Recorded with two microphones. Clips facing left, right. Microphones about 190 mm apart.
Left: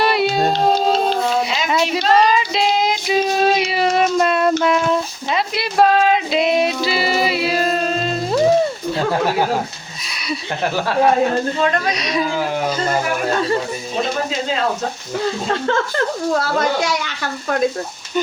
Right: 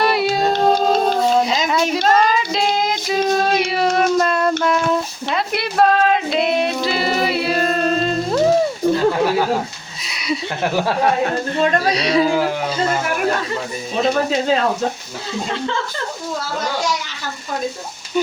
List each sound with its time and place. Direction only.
0.0 s music: centre (ahead or behind)
3.1 s a sound: centre (ahead or behind)
3.8 s child singing: 5° left (ahead or behind)
6.8 s music: 5° left (ahead or behind)
11.9 s speech: 30° right (ahead or behind)
15.4 s speech: 50° left (ahead or behind)
16.3 s speech: 65° left (ahead or behind)